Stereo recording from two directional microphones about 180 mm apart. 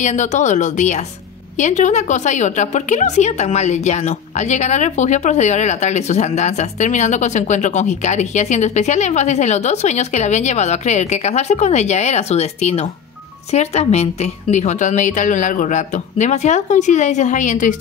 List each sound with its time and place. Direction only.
0.0 s a woman's voice: 40° left (ahead or behind)